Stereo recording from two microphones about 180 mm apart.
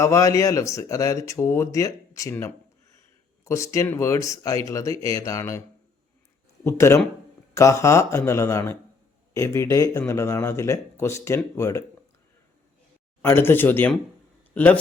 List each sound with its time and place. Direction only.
0.0 s speech: 15° left (ahead or behind)
6.7 s speech: 15° left (ahead or behind)
13.2 s a man's voice: 10° left (ahead or behind)